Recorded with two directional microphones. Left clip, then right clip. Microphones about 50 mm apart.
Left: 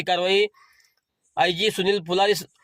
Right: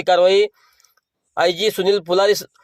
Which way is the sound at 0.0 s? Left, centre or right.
Right.